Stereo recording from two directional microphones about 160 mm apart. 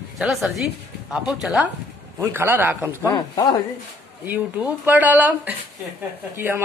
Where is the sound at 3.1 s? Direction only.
25° left (ahead or behind).